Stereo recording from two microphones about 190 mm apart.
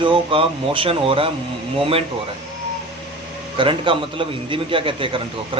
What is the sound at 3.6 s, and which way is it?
Speech, 25° right (ahead or behind).